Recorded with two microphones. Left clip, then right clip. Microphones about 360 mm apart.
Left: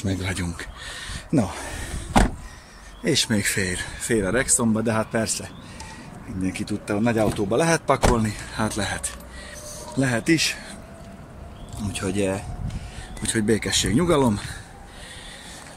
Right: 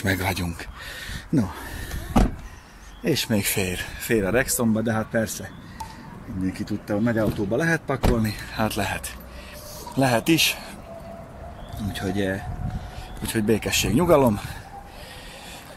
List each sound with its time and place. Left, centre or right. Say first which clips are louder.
0.0 s speech: right 5 dB; right
0.4 s speech: even; centre
3.0 s speech: left 2 dB; centre
12.0 s speech: left 2 dB; centre